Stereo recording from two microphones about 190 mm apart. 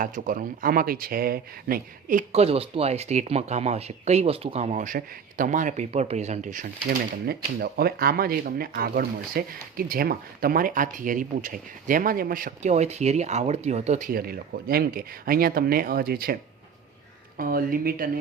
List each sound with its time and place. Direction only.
0.0 s speech: 45° right (ahead or behind)
7.3 s speech: 55° right (ahead or behind); by 14.1 s 35° right (ahead or behind)
14.1 s speech: 55° right (ahead or behind)